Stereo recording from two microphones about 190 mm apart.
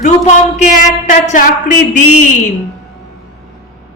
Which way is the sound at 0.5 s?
40° left (ahead or behind).